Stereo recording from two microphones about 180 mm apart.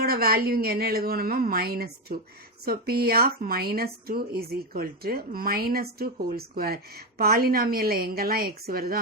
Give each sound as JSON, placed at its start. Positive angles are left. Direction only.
{"t": 0.0, "sound": "speech", "side_deg": -60}